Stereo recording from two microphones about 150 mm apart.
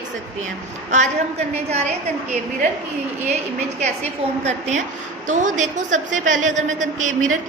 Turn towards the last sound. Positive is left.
turn(degrees=-55)  # may be behind; listen again after turning